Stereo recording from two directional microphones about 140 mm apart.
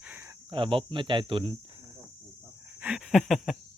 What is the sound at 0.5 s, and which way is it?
Speech, 40° right (ahead or behind).